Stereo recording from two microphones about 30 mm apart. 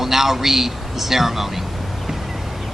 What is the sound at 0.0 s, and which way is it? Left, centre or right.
A man's voice, centre.